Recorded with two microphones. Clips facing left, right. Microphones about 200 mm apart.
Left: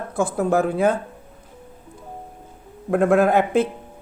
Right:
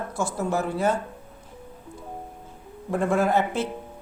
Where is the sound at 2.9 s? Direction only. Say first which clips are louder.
Left 6 dB; 60° left (ahead or behind).